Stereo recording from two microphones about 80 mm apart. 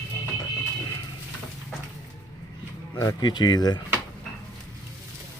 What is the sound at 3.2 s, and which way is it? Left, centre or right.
Speech, left.